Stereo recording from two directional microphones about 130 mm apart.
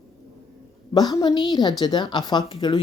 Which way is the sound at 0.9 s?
35° left (ahead or behind).